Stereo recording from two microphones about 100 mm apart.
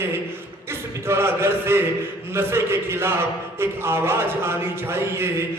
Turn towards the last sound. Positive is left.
turn(degrees=-25)  # may be behind; listen again after turning